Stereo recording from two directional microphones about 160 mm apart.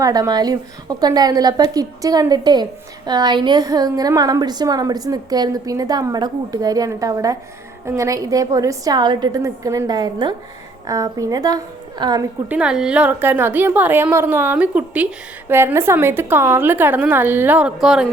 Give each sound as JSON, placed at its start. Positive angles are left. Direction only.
{"t": 0.0, "sound": "a woman's voice", "side_deg": -25}
{"t": 12.5, "sound": "a woman's voice", "side_deg": -5}